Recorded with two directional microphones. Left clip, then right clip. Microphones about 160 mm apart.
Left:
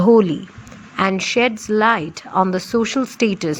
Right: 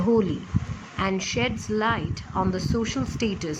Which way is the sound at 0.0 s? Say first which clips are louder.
Left 10 dB; 45° left (ahead or behind).